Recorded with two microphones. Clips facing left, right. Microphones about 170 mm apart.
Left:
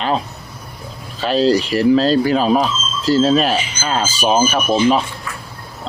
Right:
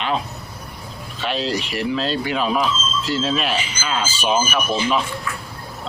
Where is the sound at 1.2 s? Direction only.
40° left (ahead or behind).